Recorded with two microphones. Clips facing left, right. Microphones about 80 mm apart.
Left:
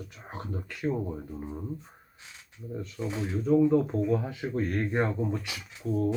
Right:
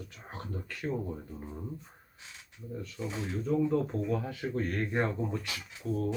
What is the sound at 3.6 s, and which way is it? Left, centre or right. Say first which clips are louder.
Speech: left 5 dB; left.